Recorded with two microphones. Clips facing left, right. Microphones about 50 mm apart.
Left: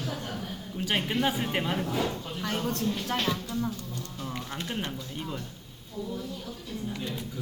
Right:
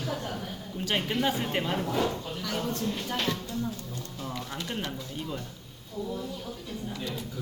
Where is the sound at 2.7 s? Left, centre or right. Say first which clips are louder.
Left 2 dB; left.